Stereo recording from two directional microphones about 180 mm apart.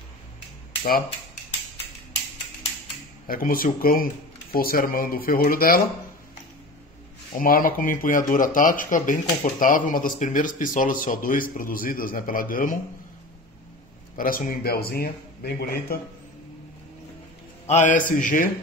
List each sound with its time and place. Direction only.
3.3 s speech: 55° left (ahead or behind)
7.3 s speech: 50° left (ahead or behind)
14.1 s speech: 50° left (ahead or behind)
17.6 s speech: 45° left (ahead or behind)